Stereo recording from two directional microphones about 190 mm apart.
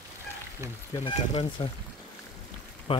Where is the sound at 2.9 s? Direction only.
30° left (ahead or behind).